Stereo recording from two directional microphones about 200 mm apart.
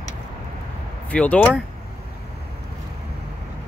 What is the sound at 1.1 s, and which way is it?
Speech, 5° left (ahead or behind).